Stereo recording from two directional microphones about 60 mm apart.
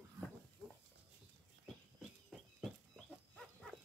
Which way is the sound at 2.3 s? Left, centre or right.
Centre.